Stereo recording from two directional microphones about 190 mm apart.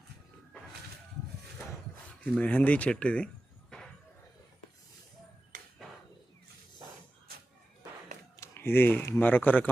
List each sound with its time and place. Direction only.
2.3 s speech: 5° left (ahead or behind)
5.5 s ping: 45° right (ahead or behind)
8.4 s speech: 15° left (ahead or behind)